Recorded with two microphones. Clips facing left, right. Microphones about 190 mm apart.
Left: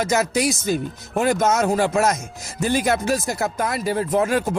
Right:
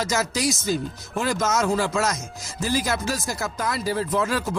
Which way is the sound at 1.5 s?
55° left (ahead or behind).